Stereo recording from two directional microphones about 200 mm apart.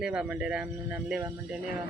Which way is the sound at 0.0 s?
5° right (ahead or behind).